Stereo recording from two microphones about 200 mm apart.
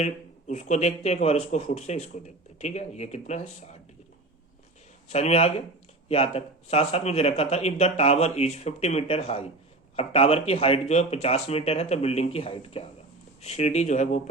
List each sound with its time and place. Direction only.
0.0 s speech: 35° left (ahead or behind)
5.0 s speech: 30° left (ahead or behind)